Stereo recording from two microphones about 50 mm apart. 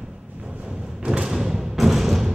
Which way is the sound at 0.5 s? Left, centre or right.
Centre.